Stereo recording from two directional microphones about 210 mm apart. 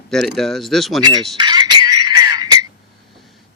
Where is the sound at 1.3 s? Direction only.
20° right (ahead or behind).